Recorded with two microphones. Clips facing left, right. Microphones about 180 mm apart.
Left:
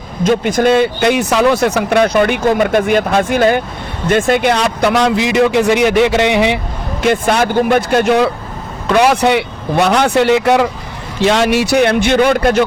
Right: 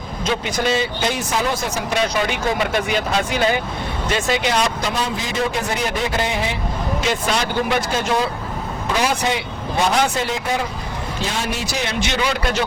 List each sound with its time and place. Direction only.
0.3 s a man's voice: 50° left (ahead or behind); by 6.6 s 75° left (ahead or behind)
7.0 s a man's voice: 55° left (ahead or behind)